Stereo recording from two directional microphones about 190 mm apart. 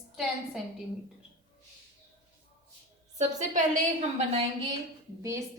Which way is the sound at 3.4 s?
40° right (ahead or behind).